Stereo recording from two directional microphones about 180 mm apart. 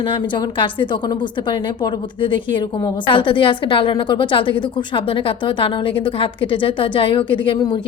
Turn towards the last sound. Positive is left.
turn(degrees=25)  # may be behind; listen again after turning